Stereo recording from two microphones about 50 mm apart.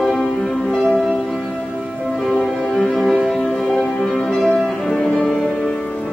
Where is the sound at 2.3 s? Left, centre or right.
Centre.